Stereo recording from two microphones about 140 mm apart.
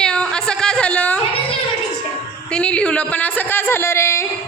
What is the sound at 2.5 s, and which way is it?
A man's voice, 5° left (ahead or behind).